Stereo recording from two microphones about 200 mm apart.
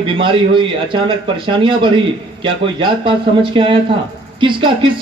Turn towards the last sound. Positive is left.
turn(degrees=-25)  # may be behind; listen again after turning